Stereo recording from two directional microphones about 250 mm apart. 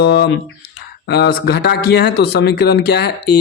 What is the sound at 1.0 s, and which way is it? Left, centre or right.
Speech, left.